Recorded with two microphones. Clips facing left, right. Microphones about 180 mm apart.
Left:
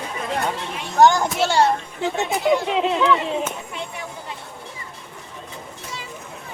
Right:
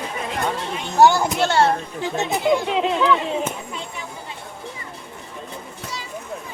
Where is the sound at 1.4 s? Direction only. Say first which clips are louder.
Even; 10° left (ahead or behind).